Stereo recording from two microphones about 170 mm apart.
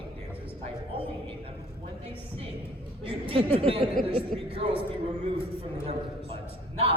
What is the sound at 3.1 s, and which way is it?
A man's voice, 35° right (ahead or behind).